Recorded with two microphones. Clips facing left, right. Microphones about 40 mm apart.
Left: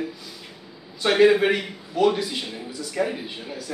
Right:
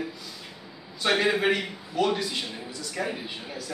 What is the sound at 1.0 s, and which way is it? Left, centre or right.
A man's voice, centre.